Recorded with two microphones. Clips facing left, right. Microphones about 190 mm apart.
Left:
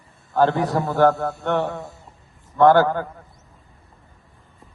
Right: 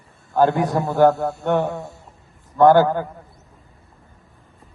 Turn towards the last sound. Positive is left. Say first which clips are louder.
# right 1 dB
turn(degrees=-15)  # may be behind; listen again after turning